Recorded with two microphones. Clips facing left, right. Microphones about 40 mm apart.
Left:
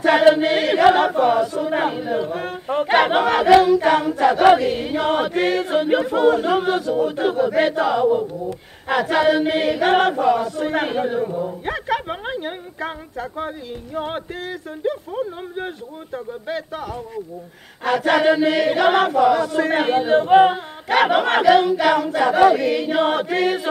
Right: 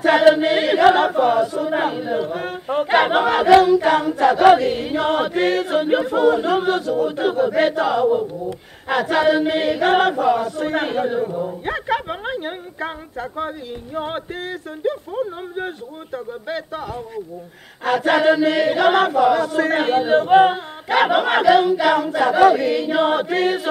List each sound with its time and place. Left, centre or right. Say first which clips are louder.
0.3 s battle cry: right 1 dB; centre
6.6 s speech: right 1 dB; centre
7.1 s battle cry: even; centre
12.1 s speech: right 1 dB; centre
15.1 s battle cry: right 1 dB; centre
16.4 s a sound: left 1 dB; right
17.8 s speech: right 1 dB; centre
18.3 s battle cry: right 1 dB; centre